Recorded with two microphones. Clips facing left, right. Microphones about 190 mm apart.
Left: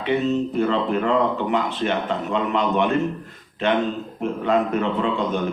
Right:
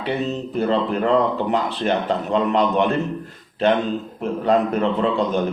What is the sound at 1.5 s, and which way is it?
A man's voice, 35° right (ahead or behind).